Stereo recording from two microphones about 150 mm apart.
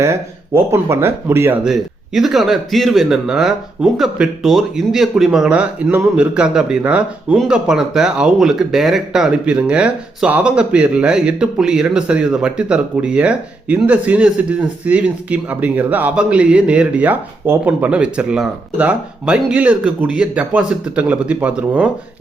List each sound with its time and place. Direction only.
0.0 s a man's voice: 20° right (ahead or behind)
1.6 s a man's voice: centre (ahead or behind)